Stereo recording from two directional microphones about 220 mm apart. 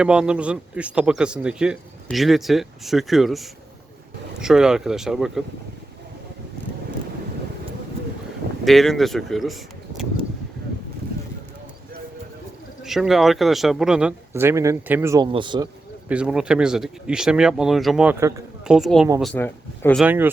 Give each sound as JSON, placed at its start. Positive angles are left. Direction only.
{"t": 0.0, "sound": "speech", "side_deg": -5}
{"t": 8.6, "sound": "speech", "side_deg": 0}
{"t": 12.8, "sound": "speech", "side_deg": 0}
{"t": 16.0, "sound": "speech", "side_deg": -5}
{"t": 20.0, "sound": "speech", "side_deg": -10}